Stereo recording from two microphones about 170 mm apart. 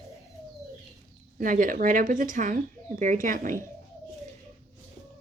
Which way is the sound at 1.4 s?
50° right (ahead or behind).